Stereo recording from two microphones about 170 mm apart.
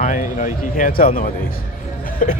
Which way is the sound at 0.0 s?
50° left (ahead or behind).